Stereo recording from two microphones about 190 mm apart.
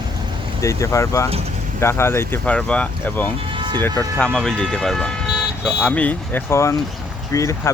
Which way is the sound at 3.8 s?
5° left (ahead or behind).